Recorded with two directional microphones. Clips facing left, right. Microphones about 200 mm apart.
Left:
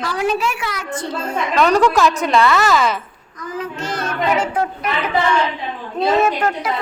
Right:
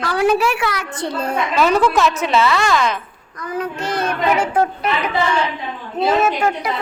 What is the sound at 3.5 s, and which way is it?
Speech, 60° right (ahead or behind).